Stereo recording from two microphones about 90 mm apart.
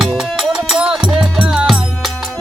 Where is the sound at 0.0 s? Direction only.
Centre (ahead or behind).